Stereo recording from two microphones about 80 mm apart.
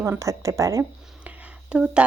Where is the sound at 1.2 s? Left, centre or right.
Centre.